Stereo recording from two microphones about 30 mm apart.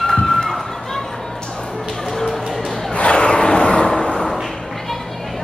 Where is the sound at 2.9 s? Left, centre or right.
Left.